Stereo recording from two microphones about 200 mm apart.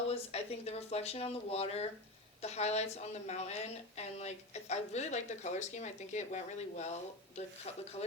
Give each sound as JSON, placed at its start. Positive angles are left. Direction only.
{"t": 0.1, "sound": "a woman's voice", "side_deg": 30}